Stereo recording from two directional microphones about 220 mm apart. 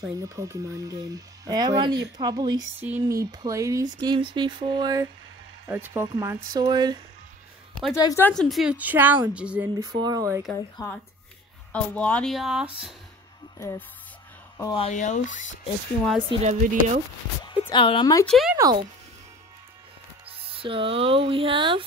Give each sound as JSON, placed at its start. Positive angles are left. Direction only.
{"t": 0.0, "sound": "speech", "side_deg": -15}
{"t": 2.9, "sound": "a sound", "side_deg": -15}
{"t": 5.7, "sound": "speech", "side_deg": -10}
{"t": 7.9, "sound": "speech", "side_deg": 15}
{"t": 9.8, "sound": "speech", "side_deg": -20}
{"t": 10.5, "sound": "speech", "side_deg": 10}
{"t": 13.6, "sound": "speech", "side_deg": 15}
{"t": 14.9, "sound": "speech", "side_deg": 35}
{"t": 16.3, "sound": "speech", "side_deg": -30}
{"t": 17.5, "sound": "speech", "side_deg": 20}
{"t": 18.2, "sound": "speech", "side_deg": 0}
{"t": 18.6, "sound": "a sound", "side_deg": -20}
{"t": 20.2, "sound": "speech", "side_deg": -25}